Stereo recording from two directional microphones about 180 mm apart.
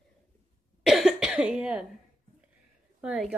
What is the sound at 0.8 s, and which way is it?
Cough, centre (ahead or behind).